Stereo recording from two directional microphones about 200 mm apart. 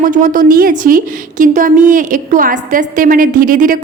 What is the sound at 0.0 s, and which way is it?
A woman's voice, 40° right (ahead or behind).